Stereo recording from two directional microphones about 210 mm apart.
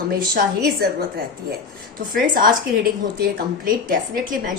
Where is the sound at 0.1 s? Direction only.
45° right (ahead or behind).